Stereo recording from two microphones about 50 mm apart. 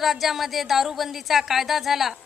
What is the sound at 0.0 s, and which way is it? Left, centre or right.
A woman's voice, centre.